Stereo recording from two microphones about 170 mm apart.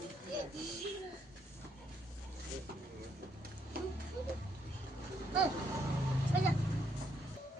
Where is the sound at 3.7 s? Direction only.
60° right (ahead or behind).